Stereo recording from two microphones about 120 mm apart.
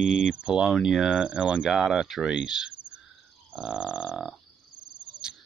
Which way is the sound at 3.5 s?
5° right (ahead or behind).